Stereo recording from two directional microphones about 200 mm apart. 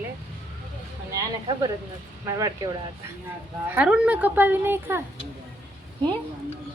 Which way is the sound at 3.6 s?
5° right (ahead or behind).